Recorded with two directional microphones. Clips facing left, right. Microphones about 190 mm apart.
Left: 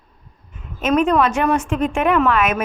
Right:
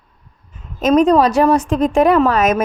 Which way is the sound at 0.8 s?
35° right (ahead or behind).